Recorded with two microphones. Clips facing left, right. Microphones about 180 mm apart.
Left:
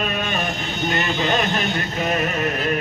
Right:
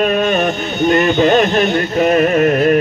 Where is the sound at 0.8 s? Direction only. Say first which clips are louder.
Right 11 dB; 50° right (ahead or behind).